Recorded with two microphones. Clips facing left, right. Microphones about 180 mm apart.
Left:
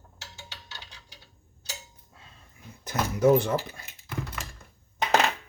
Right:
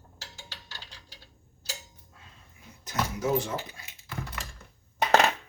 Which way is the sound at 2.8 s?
60° left (ahead or behind).